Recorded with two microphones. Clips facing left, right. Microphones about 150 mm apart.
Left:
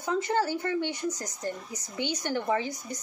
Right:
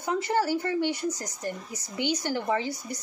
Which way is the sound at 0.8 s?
20° left (ahead or behind).